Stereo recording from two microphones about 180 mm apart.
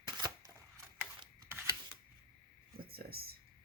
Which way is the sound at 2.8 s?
55° right (ahead or behind).